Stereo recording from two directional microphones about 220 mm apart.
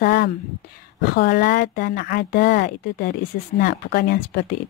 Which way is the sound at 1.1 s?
45° left (ahead or behind).